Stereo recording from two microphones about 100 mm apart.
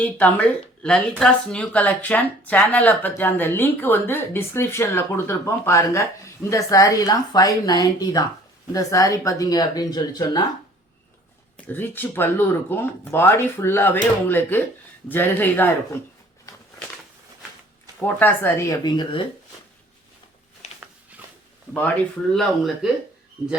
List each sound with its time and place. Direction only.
0.0 s speech: 15° left (ahead or behind); by 10.4 s 45° left (ahead or behind)
11.5 s speech: 20° left (ahead or behind)
18.0 s speech: 20° left (ahead or behind)
18.9 s speech: 45° left (ahead or behind)
20.6 s a sound: 90° left
22.3 s speech: centre (ahead or behind)